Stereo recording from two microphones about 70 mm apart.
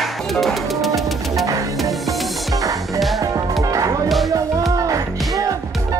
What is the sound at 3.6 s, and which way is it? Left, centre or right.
Music, right.